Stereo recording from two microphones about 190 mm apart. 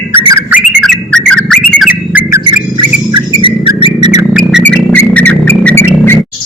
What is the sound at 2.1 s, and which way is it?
Squawk, 10° right (ahead or behind).